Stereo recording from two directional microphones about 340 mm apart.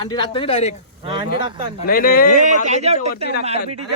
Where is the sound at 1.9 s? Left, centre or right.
Left.